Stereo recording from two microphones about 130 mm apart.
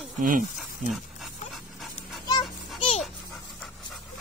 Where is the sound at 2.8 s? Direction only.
50° left (ahead or behind).